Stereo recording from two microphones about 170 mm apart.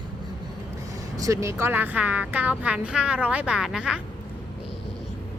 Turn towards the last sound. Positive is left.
turn(degrees=-5)  # may be behind; listen again after turning